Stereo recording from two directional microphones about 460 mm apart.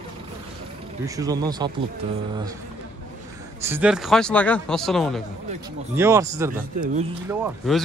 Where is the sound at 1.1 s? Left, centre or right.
Centre.